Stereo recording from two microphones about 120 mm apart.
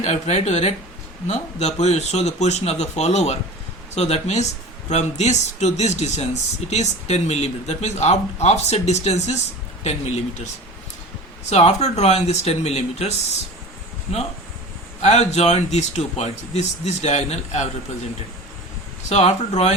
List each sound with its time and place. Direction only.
0.0 s speech: 70° left (ahead or behind)
15.0 s speech: 70° left (ahead or behind)
19.0 s speech: 65° left (ahead or behind)